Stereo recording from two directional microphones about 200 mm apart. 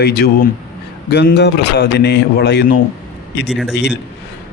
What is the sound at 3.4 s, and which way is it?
Speech, centre (ahead or behind).